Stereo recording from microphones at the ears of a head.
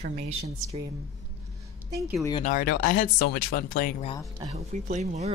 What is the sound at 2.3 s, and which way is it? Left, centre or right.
Speech, left.